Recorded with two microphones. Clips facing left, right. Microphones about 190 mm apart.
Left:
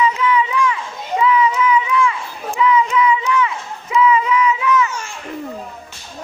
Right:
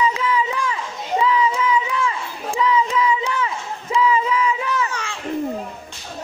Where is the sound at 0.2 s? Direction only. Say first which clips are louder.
Left 4 dB; 35° right (ahead or behind).